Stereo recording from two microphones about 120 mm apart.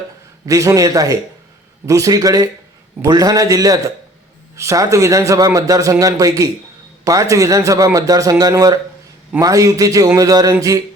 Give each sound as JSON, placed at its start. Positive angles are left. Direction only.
{"t": 0.4, "sound": "a man's voice", "side_deg": -25}